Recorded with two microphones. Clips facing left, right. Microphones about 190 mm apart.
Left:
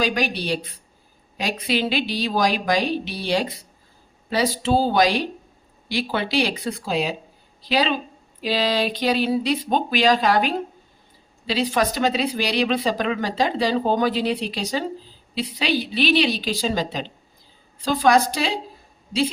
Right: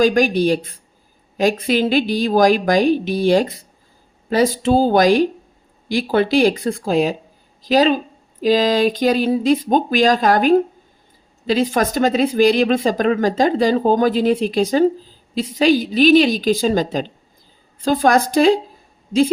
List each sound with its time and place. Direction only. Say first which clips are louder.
0.0 s speech: right 9 dB; 45° right (ahead or behind)